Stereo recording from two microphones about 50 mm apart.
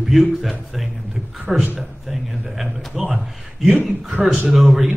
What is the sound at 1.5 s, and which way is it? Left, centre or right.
A man's voice, centre.